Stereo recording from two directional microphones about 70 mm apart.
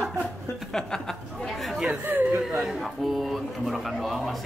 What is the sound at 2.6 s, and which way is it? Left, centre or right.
Speech, centre.